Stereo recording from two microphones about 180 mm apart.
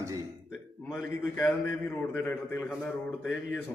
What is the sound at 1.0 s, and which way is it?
A man's voice, 10° left (ahead or behind).